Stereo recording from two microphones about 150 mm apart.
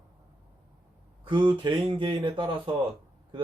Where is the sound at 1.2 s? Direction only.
30° right (ahead or behind).